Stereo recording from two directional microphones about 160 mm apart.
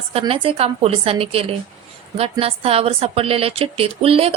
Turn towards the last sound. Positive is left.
turn(degrees=-35)  # may be behind; listen again after turning